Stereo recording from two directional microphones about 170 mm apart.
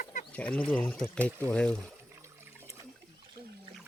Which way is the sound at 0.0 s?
50° left (ahead or behind).